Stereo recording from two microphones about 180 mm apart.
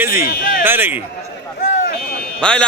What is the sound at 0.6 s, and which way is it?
Speech, 10° right (ahead or behind).